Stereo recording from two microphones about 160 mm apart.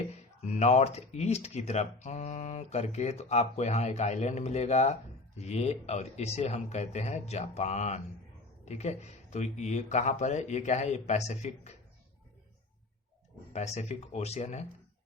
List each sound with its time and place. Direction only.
0.4 s speech: 45° left (ahead or behind)
13.5 s speech: 45° left (ahead or behind)